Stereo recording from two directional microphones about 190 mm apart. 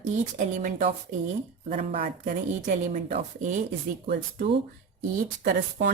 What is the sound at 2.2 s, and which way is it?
Speech, 45° right (ahead or behind).